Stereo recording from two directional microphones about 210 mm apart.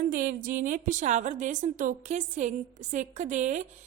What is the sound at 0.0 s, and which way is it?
A woman's voice, 40° right (ahead or behind).